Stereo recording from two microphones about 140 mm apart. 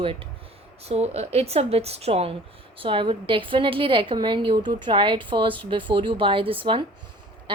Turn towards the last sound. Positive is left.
turn(degrees=-40)  # may be behind; listen again after turning